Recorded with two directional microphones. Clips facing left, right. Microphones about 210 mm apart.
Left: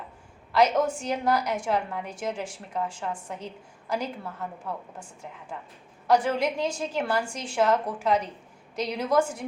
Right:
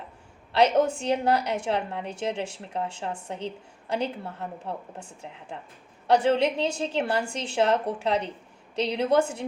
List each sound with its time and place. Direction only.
0.5 s a woman's voice: 30° right (ahead or behind)